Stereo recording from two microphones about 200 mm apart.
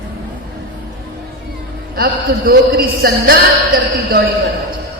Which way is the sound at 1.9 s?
50° right (ahead or behind).